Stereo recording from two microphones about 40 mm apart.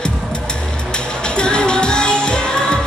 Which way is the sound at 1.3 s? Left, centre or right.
Left.